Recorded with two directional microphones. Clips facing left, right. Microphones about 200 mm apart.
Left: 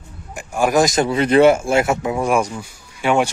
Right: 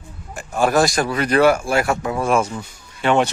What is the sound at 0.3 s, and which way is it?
Speech, 15° left (ahead or behind).